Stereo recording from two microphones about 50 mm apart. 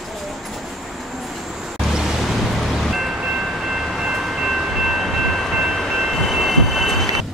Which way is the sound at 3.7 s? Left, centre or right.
Centre.